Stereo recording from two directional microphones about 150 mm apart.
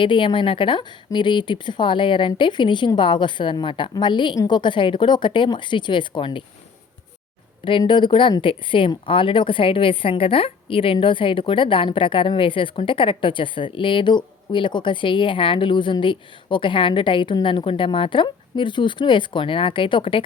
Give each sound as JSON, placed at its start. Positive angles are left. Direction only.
{"t": 0.0, "sound": "speech", "side_deg": 35}
{"t": 7.6, "sound": "speech", "side_deg": 35}